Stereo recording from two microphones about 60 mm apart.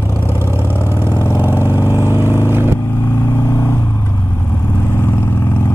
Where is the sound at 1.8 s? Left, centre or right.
Right.